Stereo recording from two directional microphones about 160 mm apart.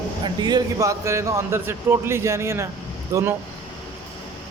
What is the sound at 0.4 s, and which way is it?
A man's voice, 25° right (ahead or behind).